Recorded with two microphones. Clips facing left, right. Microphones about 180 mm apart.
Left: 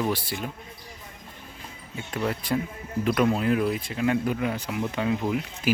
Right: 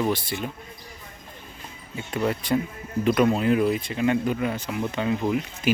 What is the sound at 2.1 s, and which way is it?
Speech, centre (ahead or behind).